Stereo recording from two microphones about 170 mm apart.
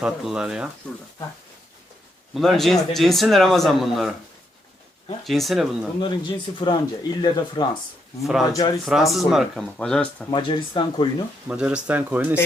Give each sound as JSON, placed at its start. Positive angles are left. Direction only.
{"t": 0.0, "sound": "a man's voice", "side_deg": -5}
{"t": 2.3, "sound": "a man's voice", "side_deg": 0}
{"t": 5.2, "sound": "a man's voice", "side_deg": 0}
{"t": 6.0, "sound": "speech", "side_deg": 30}
{"t": 8.2, "sound": "a man's voice", "side_deg": 0}
{"t": 10.3, "sound": "speech", "side_deg": 30}
{"t": 11.4, "sound": "speech", "side_deg": -5}